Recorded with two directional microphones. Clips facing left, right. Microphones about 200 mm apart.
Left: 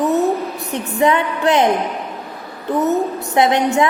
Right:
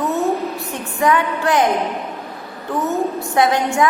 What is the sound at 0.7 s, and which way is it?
Speech, 20° left (ahead or behind).